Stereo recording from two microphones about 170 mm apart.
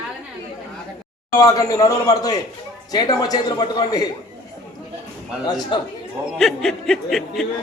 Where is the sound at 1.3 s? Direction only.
20° left (ahead or behind).